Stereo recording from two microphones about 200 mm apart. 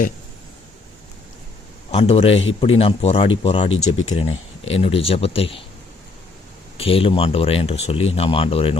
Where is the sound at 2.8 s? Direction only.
30° left (ahead or behind).